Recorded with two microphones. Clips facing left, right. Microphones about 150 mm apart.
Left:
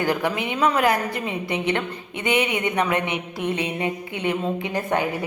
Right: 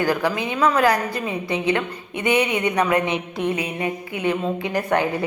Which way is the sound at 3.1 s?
20° right (ahead or behind).